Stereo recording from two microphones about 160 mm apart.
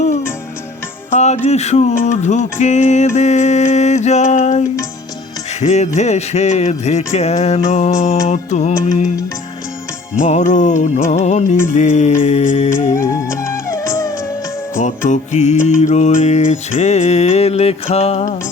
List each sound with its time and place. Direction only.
1.1 s mantra: 45° left (ahead or behind)
10.2 s mantra: 50° left (ahead or behind)
13.0 s music: 15° left (ahead or behind)
14.8 s mantra: 50° left (ahead or behind)